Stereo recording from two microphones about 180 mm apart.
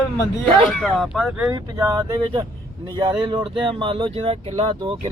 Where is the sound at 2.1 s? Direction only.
30° right (ahead or behind).